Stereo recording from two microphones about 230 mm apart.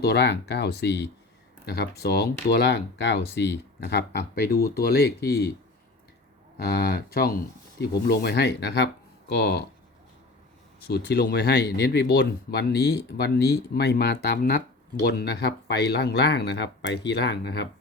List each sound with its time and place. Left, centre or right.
0.0 s speech: left
6.6 s speech: left
10.8 s speech: left